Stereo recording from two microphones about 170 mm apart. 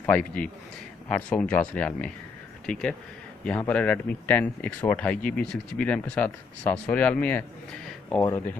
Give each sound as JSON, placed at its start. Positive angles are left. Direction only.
{"t": 0.0, "sound": "speech", "side_deg": 10}
{"t": 8.2, "sound": "speech", "side_deg": 20}